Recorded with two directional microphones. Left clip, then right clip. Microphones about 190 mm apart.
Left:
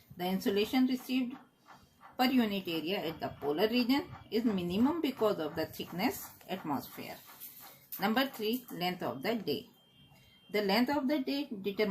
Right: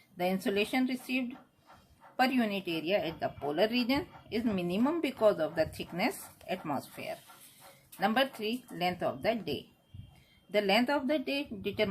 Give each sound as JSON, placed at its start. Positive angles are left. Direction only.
{"t": 0.4, "sound": "a woman's voice", "side_deg": -30}